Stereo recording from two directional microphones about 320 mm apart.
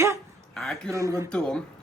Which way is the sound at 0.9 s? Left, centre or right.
Centre.